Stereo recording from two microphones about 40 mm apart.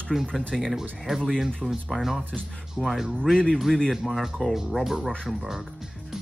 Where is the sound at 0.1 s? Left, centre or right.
Centre.